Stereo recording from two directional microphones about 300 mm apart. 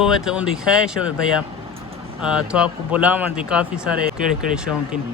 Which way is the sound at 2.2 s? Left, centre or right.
Centre.